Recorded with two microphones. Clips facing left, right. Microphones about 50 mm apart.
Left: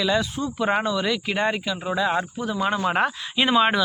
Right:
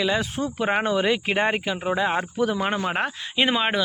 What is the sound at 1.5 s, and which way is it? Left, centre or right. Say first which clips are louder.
Speech: right 1 dB; right.